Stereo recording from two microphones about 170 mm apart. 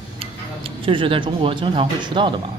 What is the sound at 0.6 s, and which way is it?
Speech, 30° right (ahead or behind).